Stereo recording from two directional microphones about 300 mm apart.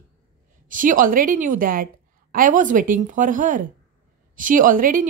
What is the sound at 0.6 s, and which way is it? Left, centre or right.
A woman's voice, right.